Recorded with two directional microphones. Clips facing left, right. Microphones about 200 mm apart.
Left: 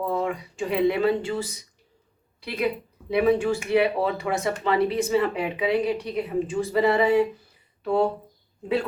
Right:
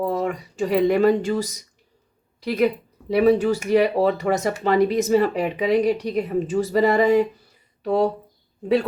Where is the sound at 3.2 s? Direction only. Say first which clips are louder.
Right 4 dB; 40° right (ahead or behind).